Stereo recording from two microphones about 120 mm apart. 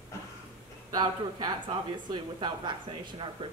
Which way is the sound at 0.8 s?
35° right (ahead or behind).